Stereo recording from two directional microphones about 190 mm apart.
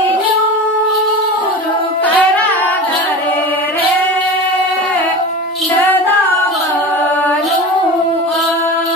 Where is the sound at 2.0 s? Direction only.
10° left (ahead or behind).